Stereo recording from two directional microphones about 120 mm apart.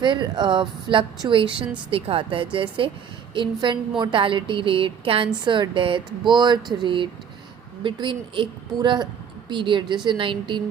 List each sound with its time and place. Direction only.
0.0 s a woman's voice: 40° right (ahead or behind)
6.6 s speech: centre (ahead or behind)
6.8 s a woman's voice: 40° right (ahead or behind)